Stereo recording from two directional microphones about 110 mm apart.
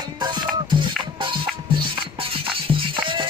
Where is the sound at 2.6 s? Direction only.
50° right (ahead or behind).